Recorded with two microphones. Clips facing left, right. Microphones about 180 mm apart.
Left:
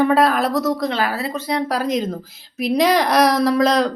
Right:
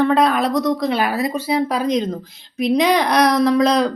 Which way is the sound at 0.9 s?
15° right (ahead or behind).